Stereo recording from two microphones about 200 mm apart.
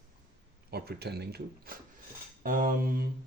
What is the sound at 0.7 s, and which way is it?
Speech, 55° right (ahead or behind).